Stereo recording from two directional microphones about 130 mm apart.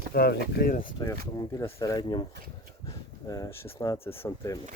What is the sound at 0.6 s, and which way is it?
Speech, 90° left.